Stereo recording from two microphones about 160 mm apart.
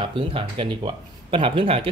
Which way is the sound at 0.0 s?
35° right (ahead or behind).